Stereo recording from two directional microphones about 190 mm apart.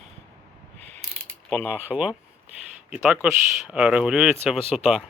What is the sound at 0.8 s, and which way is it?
Ratchet, 35° right (ahead or behind).